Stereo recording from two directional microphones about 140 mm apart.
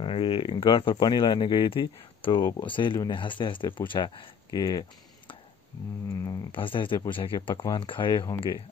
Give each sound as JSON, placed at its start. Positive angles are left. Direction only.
{"t": 0.0, "sound": "speech", "side_deg": 40}
{"t": 6.0, "sound": "speech", "side_deg": 25}
{"t": 6.5, "sound": "speech", "side_deg": 35}
{"t": 7.5, "sound": "speech", "side_deg": 20}
{"t": 7.8, "sound": "speech", "side_deg": 35}